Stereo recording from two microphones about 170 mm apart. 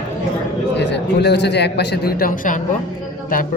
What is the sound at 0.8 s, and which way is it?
Speech, 90° left.